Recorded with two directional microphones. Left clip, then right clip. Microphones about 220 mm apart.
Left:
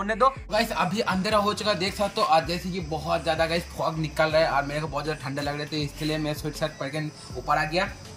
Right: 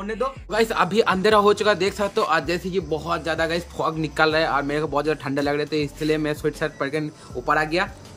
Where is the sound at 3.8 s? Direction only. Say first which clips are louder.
Right 5 dB; 25° right (ahead or behind).